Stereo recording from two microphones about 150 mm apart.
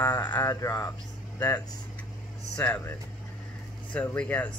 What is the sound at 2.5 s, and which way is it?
Speech, 5° left (ahead or behind).